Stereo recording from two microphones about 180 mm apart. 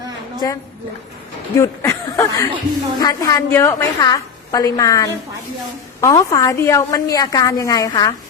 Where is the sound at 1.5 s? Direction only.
15° left (ahead or behind).